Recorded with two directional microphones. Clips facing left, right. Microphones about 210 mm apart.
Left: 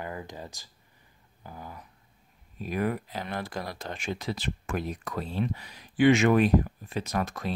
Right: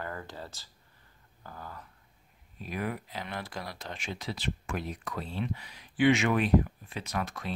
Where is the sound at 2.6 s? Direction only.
45° left (ahead or behind).